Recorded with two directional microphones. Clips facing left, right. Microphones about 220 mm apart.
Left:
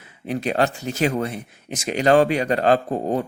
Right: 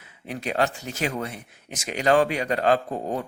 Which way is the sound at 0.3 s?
30° left (ahead or behind).